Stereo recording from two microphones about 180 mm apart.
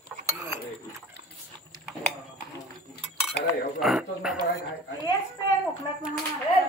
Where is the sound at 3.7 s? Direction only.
Centre (ahead or behind).